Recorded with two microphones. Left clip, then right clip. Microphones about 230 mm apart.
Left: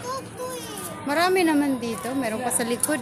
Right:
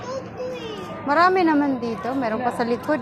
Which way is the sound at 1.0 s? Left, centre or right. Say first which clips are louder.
Right 4 dB; centre.